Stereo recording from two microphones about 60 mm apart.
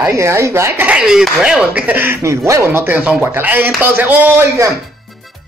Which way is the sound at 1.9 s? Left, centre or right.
Right.